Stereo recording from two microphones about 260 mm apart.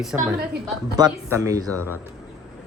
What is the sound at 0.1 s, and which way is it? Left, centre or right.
Speech, centre.